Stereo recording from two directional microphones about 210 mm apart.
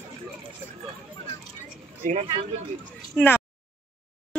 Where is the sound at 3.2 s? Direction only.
10° left (ahead or behind).